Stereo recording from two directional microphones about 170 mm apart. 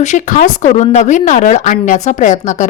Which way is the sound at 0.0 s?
45° left (ahead or behind).